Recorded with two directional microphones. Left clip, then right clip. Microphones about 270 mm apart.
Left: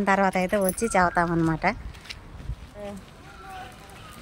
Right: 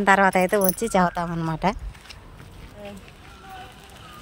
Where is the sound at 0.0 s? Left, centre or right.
Centre; by 1.8 s right.